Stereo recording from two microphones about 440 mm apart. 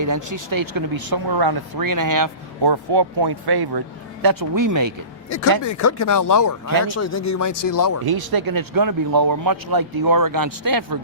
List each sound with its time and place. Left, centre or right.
0.0 s speech: right
5.6 s speech: left
8.0 s speech: right